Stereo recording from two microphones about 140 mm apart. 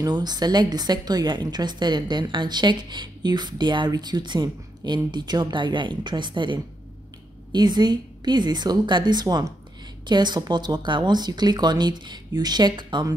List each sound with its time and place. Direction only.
0.0 s speech: 30° right (ahead or behind)